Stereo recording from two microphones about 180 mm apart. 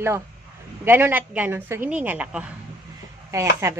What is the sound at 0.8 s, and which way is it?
A man's voice, 10° right (ahead or behind).